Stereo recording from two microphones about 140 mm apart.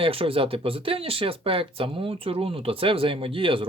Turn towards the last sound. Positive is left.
turn(degrees=-40)  # may be behind; listen again after turning